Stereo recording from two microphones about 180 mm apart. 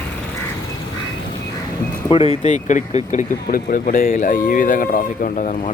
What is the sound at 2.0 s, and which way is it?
Speech, 30° left (ahead or behind).